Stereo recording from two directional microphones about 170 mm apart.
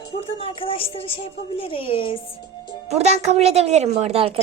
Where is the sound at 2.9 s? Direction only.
40° right (ahead or behind).